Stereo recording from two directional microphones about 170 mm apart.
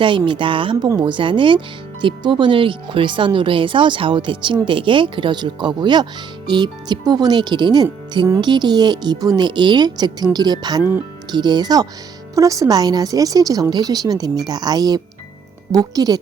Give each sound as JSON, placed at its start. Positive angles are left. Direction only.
{"t": 0.0, "sound": "speech", "side_deg": -30}